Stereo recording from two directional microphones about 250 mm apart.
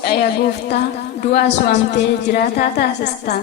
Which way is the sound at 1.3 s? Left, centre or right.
Left.